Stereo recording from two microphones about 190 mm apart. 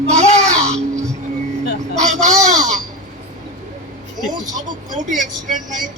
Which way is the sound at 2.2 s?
40° right (ahead or behind).